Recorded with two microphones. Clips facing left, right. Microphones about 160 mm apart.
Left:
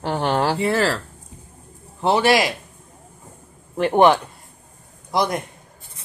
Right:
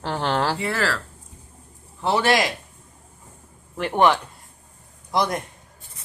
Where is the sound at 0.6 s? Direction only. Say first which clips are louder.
Left 5 dB; 25° left (ahead or behind).